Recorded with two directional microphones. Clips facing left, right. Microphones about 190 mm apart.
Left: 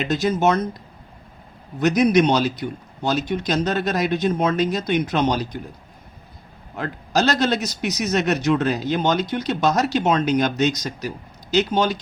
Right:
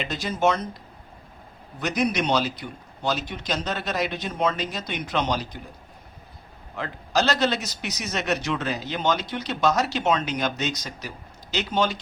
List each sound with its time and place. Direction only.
0.0 s a man's voice: 45° left (ahead or behind)
1.8 s a man's voice: 45° left (ahead or behind)
6.7 s a man's voice: 45° left (ahead or behind)